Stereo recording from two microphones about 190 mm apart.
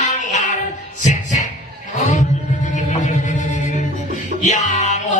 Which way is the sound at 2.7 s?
40° left (ahead or behind).